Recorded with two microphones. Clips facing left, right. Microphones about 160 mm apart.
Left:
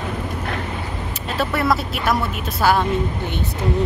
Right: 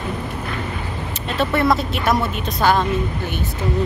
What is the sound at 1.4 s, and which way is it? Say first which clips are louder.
Speech: right 2 dB; centre (ahead or behind).